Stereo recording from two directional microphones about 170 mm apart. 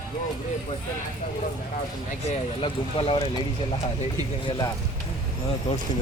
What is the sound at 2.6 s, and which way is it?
Speech, 30° left (ahead or behind).